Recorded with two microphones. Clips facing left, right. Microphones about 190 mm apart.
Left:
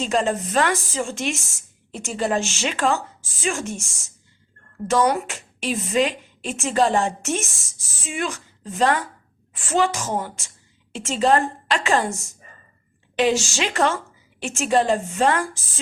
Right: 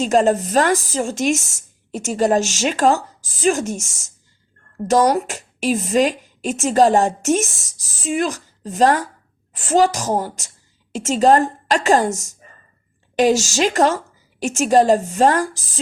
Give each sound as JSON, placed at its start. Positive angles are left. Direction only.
{"t": 0.0, "sound": "a woman's voice", "side_deg": -40}